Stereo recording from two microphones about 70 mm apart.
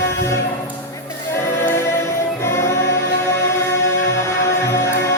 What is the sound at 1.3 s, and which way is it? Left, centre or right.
Music, left.